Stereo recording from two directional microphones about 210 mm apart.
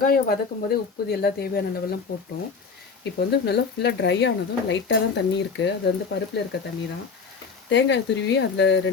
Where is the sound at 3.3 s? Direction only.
50° left (ahead or behind).